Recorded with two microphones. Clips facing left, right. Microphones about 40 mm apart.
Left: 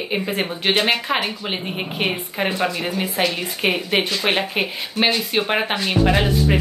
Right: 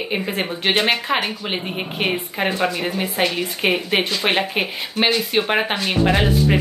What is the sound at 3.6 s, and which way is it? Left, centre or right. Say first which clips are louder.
Speech: even; centre.